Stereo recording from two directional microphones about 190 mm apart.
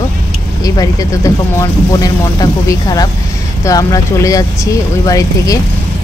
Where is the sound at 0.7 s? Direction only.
20° left (ahead or behind).